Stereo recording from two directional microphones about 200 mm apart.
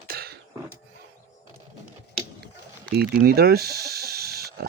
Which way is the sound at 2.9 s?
50° right (ahead or behind).